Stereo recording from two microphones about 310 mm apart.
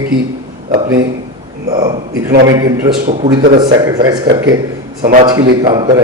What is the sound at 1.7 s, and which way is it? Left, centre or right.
Speech, centre.